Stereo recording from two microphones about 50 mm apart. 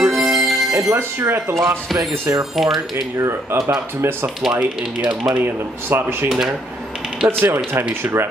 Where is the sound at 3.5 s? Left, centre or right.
Right.